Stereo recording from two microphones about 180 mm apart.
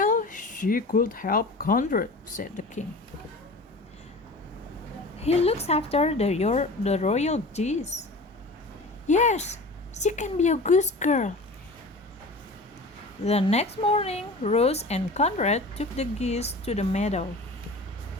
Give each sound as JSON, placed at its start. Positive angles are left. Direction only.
{"t": 0.0, "sound": "speech", "side_deg": 45}
{"t": 5.2, "sound": "speech", "side_deg": 35}
{"t": 9.0, "sound": "speech", "side_deg": 40}
{"t": 13.2, "sound": "speech", "side_deg": 35}